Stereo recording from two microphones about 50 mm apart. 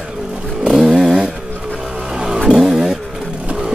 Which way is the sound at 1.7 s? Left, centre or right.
Centre.